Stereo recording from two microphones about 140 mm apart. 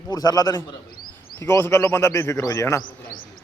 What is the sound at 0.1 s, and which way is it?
A man's voice, 30° left (ahead or behind).